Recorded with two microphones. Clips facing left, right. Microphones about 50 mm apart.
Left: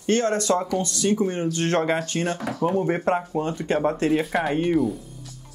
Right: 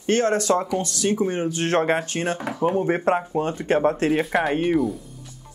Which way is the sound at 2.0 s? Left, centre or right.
Right.